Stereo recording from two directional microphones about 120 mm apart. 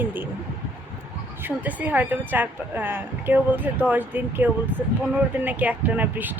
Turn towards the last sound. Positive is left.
turn(degrees=-15)  # may be behind; listen again after turning